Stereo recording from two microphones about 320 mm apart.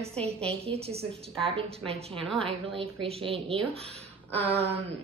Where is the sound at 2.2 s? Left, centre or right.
Centre.